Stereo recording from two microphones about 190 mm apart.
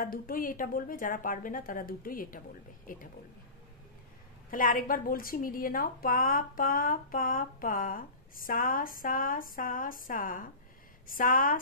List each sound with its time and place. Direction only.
0.0 s a woman's voice: 50° left (ahead or behind)
4.5 s a woman's voice: 45° left (ahead or behind)